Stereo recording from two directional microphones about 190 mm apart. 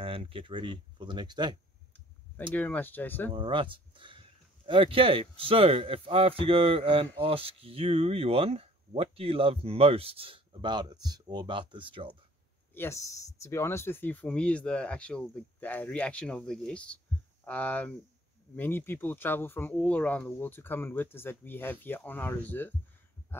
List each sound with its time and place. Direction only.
0.0 s speech: 30° right (ahead or behind)
2.5 s speech: 10° left (ahead or behind)
3.3 s speech: 25° right (ahead or behind)
12.7 s speech: 15° left (ahead or behind)